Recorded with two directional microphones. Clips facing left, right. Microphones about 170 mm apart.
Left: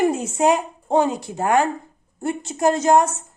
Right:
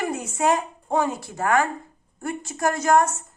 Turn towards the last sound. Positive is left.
turn(degrees=20)  # may be behind; listen again after turning